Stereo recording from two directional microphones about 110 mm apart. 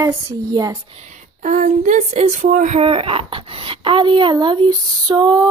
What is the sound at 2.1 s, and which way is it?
Speech, 90° right.